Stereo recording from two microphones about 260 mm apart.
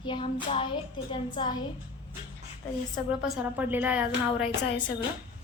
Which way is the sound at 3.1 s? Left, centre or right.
Centre.